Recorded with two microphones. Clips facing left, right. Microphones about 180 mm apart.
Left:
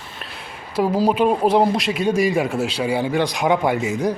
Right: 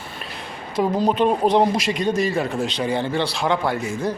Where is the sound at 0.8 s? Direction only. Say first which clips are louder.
Left 1 dB; 5° left (ahead or behind).